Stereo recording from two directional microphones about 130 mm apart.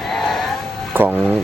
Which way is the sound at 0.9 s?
15° right (ahead or behind).